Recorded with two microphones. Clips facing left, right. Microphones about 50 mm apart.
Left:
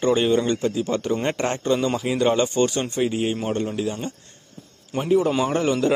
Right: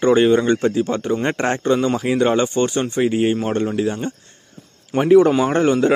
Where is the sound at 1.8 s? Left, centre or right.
Right.